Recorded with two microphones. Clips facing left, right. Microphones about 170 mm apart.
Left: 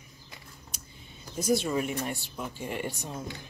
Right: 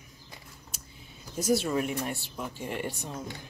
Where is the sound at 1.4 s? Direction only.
5° right (ahead or behind).